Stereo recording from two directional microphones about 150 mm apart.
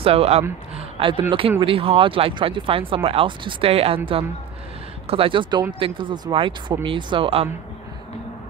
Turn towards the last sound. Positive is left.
turn(degrees=-35)  # may be behind; listen again after turning